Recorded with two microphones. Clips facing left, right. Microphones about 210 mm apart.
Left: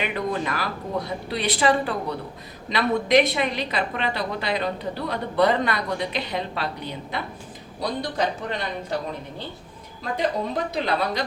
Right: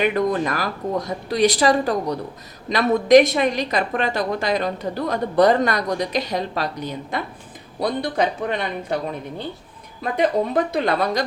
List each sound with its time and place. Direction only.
0.2 s a woman's voice: 45° right (ahead or behind)
7.8 s speech: 60° right (ahead or behind)
10.0 s a woman's voice: 55° right (ahead or behind)